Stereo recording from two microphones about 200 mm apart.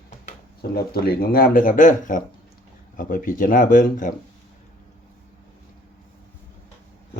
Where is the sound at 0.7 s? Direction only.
50° left (ahead or behind).